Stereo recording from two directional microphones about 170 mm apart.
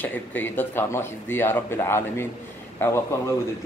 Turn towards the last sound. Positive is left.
turn(degrees=15)  # may be behind; listen again after turning